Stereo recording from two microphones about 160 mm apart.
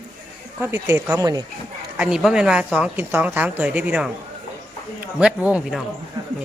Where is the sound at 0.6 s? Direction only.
15° right (ahead or behind).